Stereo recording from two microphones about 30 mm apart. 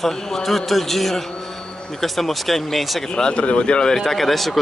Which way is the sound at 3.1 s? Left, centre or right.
Left.